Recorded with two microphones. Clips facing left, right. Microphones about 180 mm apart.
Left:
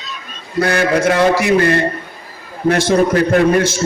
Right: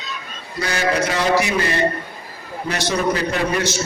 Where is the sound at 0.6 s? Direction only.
55° left (ahead or behind).